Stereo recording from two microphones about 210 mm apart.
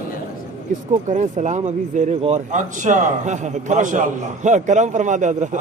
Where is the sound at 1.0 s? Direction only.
35° right (ahead or behind).